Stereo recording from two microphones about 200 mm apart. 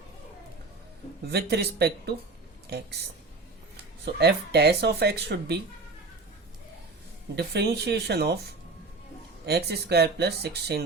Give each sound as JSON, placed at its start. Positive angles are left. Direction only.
{"t": 1.3, "sound": "speech", "side_deg": -55}
{"t": 4.0, "sound": "speech", "side_deg": -55}
{"t": 7.3, "sound": "speech", "side_deg": -55}